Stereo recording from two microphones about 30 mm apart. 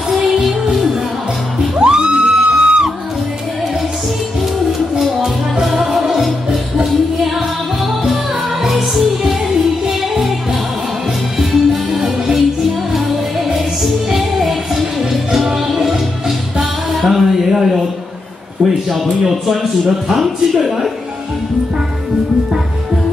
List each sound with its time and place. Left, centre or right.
1.8 s music: right
5.7 s music: centre
8.6 s music: centre
11.3 s music: centre
13.8 s music: centre
18.6 s a sound: centre
19.4 s speech: centre